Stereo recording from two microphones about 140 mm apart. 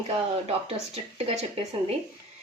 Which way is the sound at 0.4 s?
50° right (ahead or behind).